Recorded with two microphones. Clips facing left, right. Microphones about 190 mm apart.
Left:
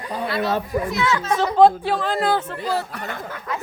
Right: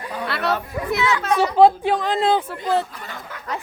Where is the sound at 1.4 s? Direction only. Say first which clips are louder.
Even; 15° right (ahead or behind).